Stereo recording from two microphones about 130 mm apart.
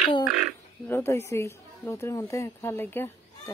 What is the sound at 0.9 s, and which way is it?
A woman's voice, 20° left (ahead or behind).